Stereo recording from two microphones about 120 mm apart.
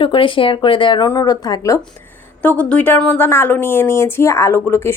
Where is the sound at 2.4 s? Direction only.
10° left (ahead or behind).